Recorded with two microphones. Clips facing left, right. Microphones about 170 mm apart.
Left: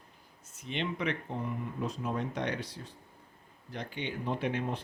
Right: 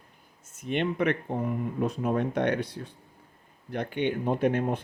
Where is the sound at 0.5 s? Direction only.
50° right (ahead or behind).